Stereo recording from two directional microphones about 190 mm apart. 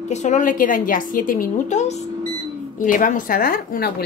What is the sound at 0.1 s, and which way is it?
A woman's voice, 40° left (ahead or behind).